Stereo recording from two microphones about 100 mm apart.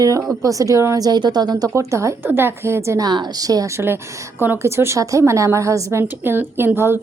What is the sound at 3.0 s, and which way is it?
A woman's voice, 45° right (ahead or behind).